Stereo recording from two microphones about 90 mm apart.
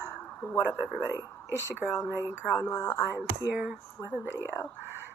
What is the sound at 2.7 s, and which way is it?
Speech, 30° left (ahead or behind).